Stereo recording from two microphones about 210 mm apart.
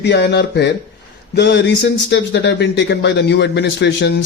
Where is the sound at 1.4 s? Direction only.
55° left (ahead or behind).